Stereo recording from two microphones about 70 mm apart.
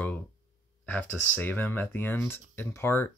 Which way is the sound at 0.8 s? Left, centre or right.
Left.